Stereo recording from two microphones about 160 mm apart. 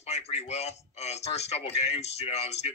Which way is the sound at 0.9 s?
40° left (ahead or behind).